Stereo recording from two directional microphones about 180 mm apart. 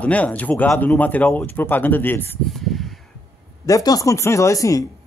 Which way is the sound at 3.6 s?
20° left (ahead or behind).